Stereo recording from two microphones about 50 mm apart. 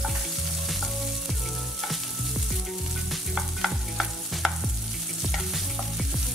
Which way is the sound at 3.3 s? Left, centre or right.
Centre.